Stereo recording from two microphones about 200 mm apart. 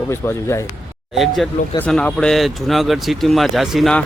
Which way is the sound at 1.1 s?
Centre (ahead or behind).